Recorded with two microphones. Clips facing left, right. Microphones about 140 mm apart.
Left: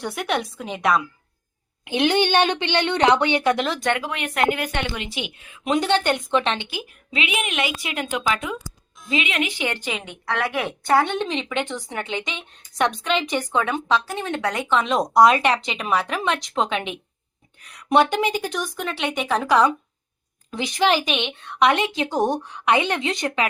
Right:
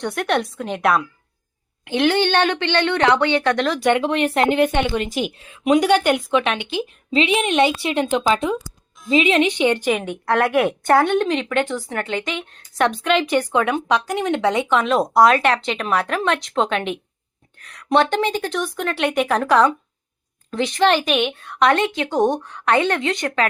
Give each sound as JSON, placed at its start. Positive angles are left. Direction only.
{"t": 0.0, "sound": "speech", "side_deg": 0}
{"t": 1.8, "sound": "a woman's voice", "side_deg": 15}
{"t": 3.8, "sound": "speech", "side_deg": -15}
{"t": 4.0, "sound": "speech", "side_deg": -30}
{"t": 4.9, "sound": "a woman's voice", "side_deg": -45}
{"t": 5.6, "sound": "speech", "side_deg": -10}
{"t": 6.7, "sound": "a woman's voice", "side_deg": -25}
{"t": 9.9, "sound": "a woman's voice", "side_deg": -55}
{"t": 11.0, "sound": "speech", "side_deg": -10}
{"t": 14.7, "sound": "a woman's voice", "side_deg": -5}